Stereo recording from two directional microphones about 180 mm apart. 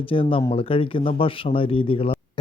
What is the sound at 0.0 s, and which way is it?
A man's voice, 30° left (ahead or behind).